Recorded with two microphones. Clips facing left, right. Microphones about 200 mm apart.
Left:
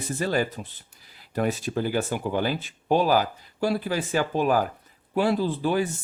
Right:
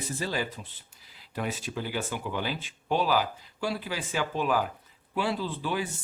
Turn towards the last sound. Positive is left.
turn(degrees=45)  # may be behind; listen again after turning